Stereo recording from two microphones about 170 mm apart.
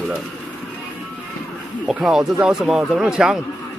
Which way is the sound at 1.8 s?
Centre (ahead or behind).